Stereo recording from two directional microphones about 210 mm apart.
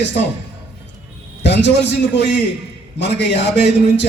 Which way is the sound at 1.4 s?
55° left (ahead or behind).